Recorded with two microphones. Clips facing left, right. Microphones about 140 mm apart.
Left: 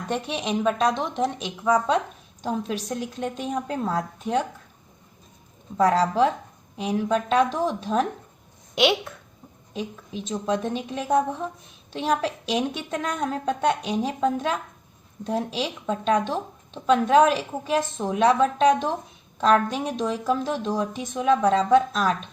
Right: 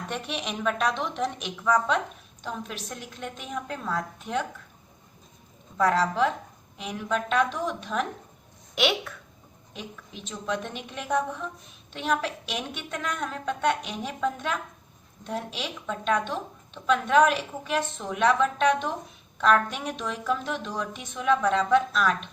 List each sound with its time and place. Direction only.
0.1 s a woman's voice: 25° left (ahead or behind)
5.7 s a woman's voice: 35° left (ahead or behind)